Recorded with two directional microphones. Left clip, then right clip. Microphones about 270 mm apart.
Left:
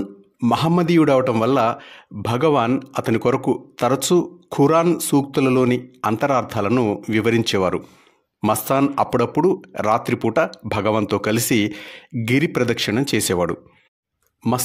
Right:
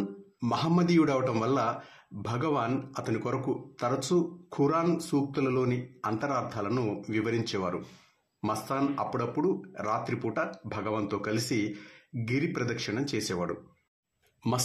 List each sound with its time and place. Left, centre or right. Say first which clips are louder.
0.4 s a man's voice: left 10 dB; left